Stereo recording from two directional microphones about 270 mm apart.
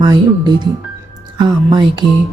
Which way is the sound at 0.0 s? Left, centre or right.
Centre.